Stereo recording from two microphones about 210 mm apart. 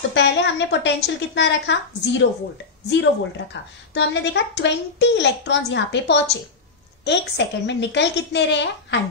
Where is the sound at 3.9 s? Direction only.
55° left (ahead or behind).